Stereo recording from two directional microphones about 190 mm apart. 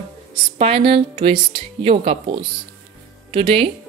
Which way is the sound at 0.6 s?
30° right (ahead or behind).